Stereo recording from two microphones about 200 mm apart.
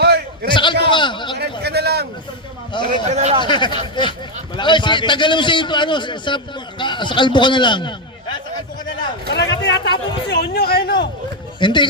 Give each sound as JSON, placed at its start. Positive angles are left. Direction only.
{"t": 0.4, "sound": "a man's voice", "side_deg": 25}
{"t": 1.4, "sound": "a man's voice", "side_deg": -55}
{"t": 2.7, "sound": "a man's voice", "side_deg": 25}
{"t": 3.1, "sound": "speech", "side_deg": -35}
{"t": 3.4, "sound": "a man's voice", "side_deg": 25}
{"t": 9.3, "sound": "speech", "side_deg": 60}
{"t": 11.6, "sound": "a man's voice", "side_deg": 25}